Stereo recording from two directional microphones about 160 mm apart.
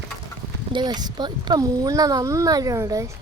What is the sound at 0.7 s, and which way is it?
Speech, 25° right (ahead or behind).